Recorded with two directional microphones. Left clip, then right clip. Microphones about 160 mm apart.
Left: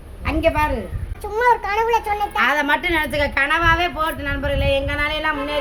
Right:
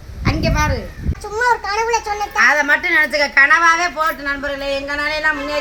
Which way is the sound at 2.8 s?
60° left (ahead or behind).